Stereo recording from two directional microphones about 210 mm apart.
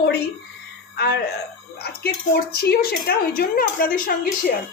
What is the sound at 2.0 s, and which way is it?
Speech, 50° left (ahead or behind).